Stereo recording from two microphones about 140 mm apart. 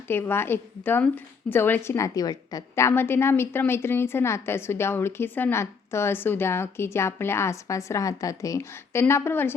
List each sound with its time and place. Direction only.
0.1 s a woman's voice: 15° left (ahead or behind)